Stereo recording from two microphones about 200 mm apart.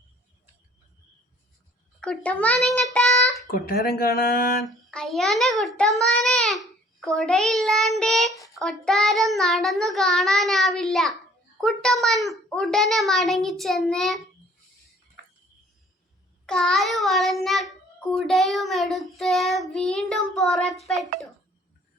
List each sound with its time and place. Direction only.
2.0 s a child's voice: 5° left (ahead or behind)
3.5 s speech: 50° left (ahead or behind)
4.9 s a child's voice: centre (ahead or behind)
16.5 s a child's voice: 5° left (ahead or behind)